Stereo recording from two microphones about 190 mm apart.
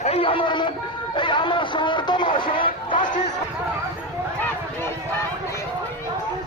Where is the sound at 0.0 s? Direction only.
30° left (ahead or behind).